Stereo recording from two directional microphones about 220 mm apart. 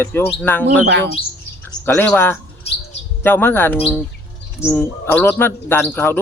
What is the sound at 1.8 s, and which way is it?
Speech, 10° left (ahead or behind).